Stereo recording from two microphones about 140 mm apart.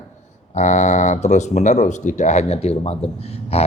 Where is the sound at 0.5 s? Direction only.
55° left (ahead or behind).